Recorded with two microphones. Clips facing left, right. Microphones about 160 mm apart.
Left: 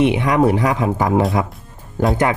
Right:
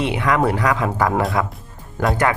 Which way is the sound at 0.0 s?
20° left (ahead or behind).